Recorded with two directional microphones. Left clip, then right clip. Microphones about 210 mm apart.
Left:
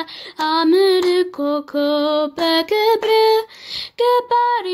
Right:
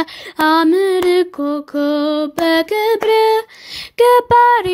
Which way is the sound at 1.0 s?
30° right (ahead or behind).